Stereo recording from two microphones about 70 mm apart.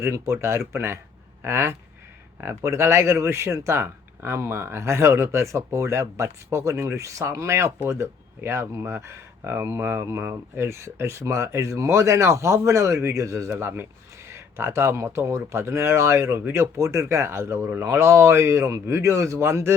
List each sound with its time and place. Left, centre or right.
0.0 s speech: right